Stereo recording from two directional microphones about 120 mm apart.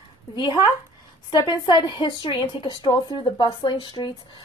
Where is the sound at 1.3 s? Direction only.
35° left (ahead or behind).